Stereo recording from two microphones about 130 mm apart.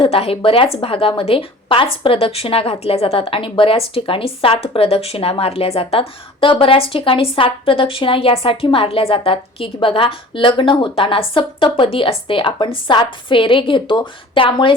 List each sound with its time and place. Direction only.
0.0 s a woman's voice: 45° left (ahead or behind)